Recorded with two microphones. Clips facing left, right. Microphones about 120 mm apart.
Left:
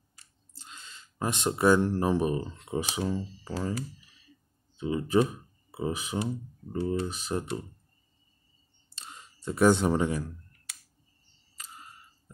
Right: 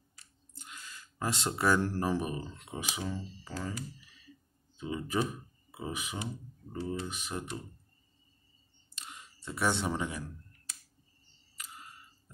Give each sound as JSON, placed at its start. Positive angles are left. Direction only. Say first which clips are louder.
{"t": 0.6, "sound": "speech", "louder": "even", "side_deg": 25}
{"t": 4.7, "sound": "speech", "louder": "left 8 dB", "side_deg": 30}
{"t": 8.9, "sound": "clicking", "louder": "left 2 dB", "side_deg": 30}
{"t": 9.6, "sound": "speech", "louder": "left 9 dB", "side_deg": 45}
{"t": 11.5, "sound": "a sound", "louder": "left 1 dB", "side_deg": 30}